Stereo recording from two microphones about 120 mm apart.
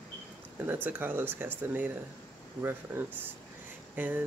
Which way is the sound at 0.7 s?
15° right (ahead or behind).